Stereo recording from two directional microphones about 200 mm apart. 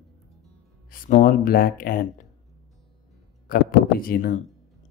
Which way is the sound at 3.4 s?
45° left (ahead or behind).